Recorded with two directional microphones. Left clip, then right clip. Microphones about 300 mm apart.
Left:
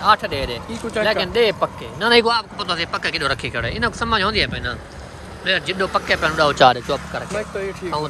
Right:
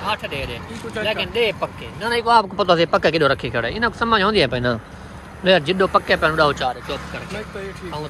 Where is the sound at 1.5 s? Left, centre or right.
Left.